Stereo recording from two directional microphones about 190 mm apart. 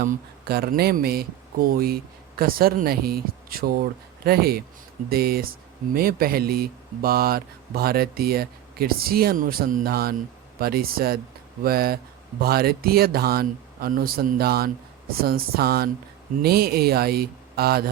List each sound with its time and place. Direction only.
0.0 s speech: 50° right (ahead or behind)